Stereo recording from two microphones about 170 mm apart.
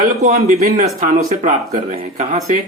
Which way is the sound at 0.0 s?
40° right (ahead or behind).